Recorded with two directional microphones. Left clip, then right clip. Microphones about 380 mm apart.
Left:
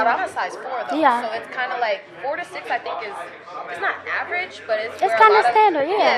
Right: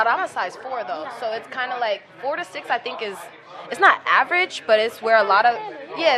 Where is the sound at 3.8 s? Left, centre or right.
Right.